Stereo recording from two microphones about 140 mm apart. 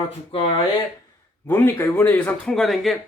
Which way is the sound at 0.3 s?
45° left (ahead or behind).